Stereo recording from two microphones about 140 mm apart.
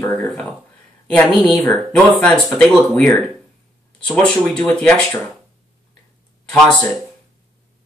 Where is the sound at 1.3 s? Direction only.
Centre (ahead or behind).